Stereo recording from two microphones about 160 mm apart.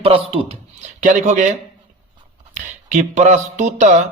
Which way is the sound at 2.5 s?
50° right (ahead or behind).